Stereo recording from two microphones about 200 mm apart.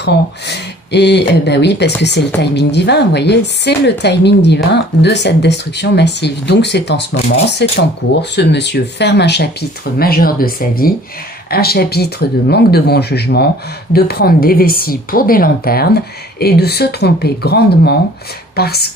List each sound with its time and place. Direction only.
0.9 s speech: 60° left (ahead or behind)